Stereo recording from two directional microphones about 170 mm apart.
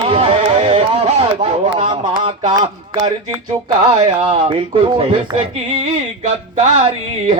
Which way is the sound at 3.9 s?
30° right (ahead or behind).